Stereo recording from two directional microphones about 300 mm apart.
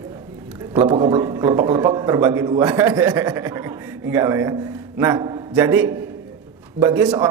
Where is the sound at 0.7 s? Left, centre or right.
Centre.